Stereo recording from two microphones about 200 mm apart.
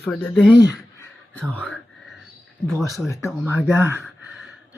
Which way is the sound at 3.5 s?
10° right (ahead or behind).